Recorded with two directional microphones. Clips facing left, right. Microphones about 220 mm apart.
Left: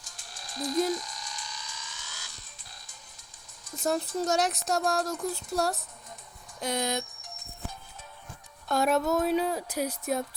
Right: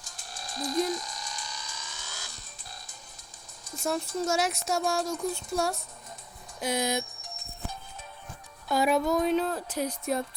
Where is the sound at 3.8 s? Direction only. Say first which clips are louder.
Left 1 dB; centre (ahead or behind).